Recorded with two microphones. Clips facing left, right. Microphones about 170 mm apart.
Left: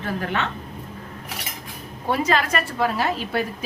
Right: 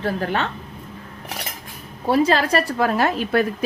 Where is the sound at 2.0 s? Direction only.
35° right (ahead or behind).